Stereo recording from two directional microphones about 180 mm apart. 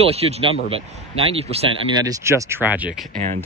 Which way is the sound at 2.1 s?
15° right (ahead or behind).